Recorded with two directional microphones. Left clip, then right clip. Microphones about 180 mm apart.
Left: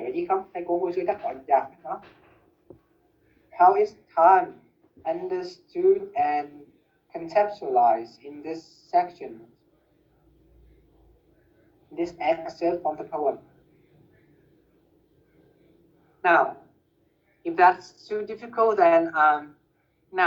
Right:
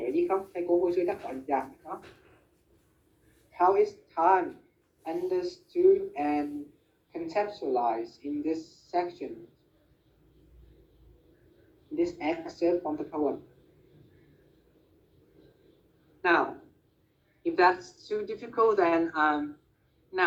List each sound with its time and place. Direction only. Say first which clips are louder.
0.0 s speech: left 2 dB; 25° left (ahead or behind)
3.5 s a woman's voice: left 6 dB; 20° left (ahead or behind)
11.9 s a woman's voice: left 5 dB; 20° left (ahead or behind)
16.2 s a woman's voice: left 5 dB; 20° left (ahead or behind)